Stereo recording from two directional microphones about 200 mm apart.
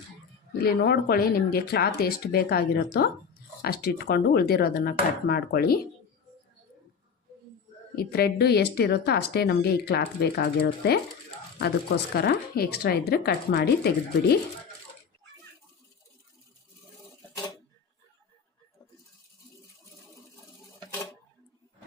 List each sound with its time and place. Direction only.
0.6 s a woman's voice: 50° left (ahead or behind)
7.9 s a woman's voice: 50° left (ahead or behind)
12.1 s a woman's voice: 55° left (ahead or behind)